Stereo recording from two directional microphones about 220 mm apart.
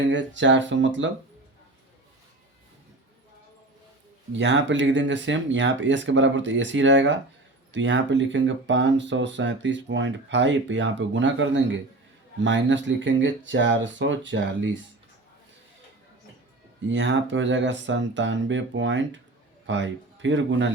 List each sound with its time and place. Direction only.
0.0 s speech: 55° right (ahead or behind)
4.4 s speech: 55° right (ahead or behind)
16.9 s speech: 55° right (ahead or behind)